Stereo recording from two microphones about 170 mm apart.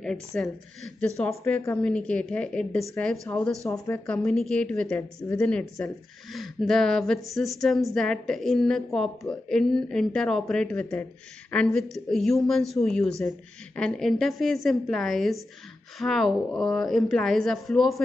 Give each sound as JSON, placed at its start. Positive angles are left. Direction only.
{"t": 0.3, "sound": "speech", "side_deg": 10}
{"t": 4.0, "sound": "speech", "side_deg": 5}